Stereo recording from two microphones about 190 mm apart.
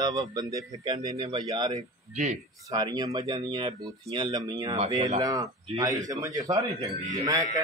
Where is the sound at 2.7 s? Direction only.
20° right (ahead or behind).